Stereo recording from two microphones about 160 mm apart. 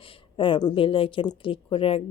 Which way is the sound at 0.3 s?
30° left (ahead or behind).